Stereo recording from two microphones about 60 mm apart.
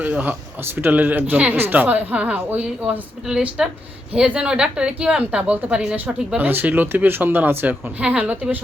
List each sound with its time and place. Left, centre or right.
0.0 s a woman's voice: right